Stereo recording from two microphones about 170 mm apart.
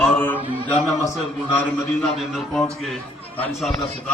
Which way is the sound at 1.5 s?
10° left (ahead or behind).